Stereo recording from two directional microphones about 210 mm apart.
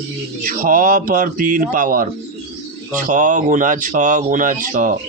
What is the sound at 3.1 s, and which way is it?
Speech, 35° right (ahead or behind).